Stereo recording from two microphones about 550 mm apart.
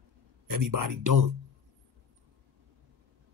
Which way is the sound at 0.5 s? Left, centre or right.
Right.